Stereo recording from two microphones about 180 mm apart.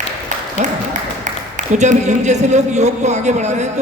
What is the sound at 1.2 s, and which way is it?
A man's voice, 40° right (ahead or behind).